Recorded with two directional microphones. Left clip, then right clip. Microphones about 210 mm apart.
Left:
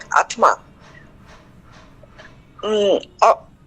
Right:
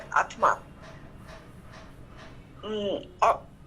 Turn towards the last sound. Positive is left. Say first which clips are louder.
# left 10 dB
turn(degrees=65)  # may be behind; listen again after turning